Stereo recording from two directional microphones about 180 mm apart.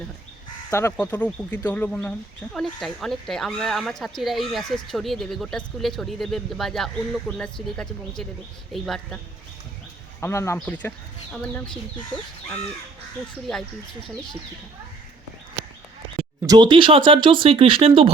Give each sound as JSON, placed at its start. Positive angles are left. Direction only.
{"t": 0.7, "sound": "speech", "side_deg": 15}
{"t": 10.2, "sound": "speech", "side_deg": 15}
{"t": 16.5, "sound": "speech", "side_deg": -25}